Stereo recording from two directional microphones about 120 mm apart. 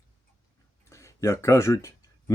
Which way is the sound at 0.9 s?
25° left (ahead or behind).